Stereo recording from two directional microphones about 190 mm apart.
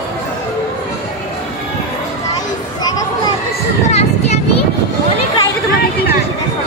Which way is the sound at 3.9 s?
35° left (ahead or behind).